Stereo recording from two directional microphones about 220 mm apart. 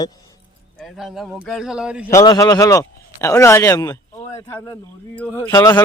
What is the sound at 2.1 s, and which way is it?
A man's voice, 15° left (ahead or behind).